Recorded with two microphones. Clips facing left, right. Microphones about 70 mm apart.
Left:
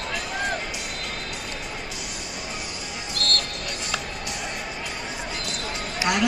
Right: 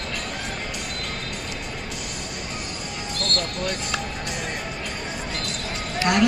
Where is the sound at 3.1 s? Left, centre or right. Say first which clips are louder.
Even; right.